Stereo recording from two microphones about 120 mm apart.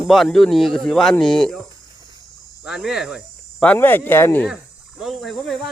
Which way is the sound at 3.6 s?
15° left (ahead or behind).